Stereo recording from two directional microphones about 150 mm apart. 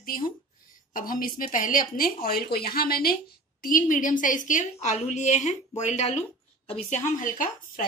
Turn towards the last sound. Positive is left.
turn(degrees=65)  # may be behind; listen again after turning